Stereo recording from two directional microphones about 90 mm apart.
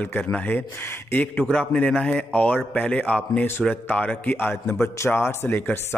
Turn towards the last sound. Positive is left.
turn(degrees=20)  # may be behind; listen again after turning